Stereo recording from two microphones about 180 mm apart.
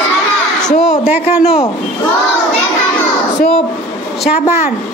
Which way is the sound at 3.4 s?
35° left (ahead or behind).